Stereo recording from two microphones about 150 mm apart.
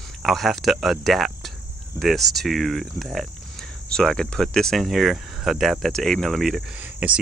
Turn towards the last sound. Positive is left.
turn(degrees=-10)  # may be behind; listen again after turning